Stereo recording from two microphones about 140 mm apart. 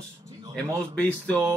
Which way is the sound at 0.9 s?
10° left (ahead or behind).